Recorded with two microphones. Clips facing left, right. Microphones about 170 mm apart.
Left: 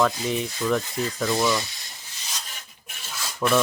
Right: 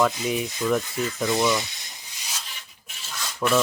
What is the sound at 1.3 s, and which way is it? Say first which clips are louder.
Speech: right 1 dB; 20° right (ahead or behind).